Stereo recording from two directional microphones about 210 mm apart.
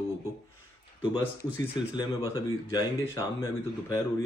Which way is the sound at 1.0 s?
20° left (ahead or behind).